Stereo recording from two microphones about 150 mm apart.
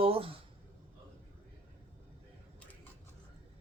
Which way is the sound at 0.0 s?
40° right (ahead or behind).